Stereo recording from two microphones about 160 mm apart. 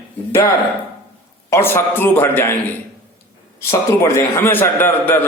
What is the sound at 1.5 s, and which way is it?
A man's voice, 15° left (ahead or behind).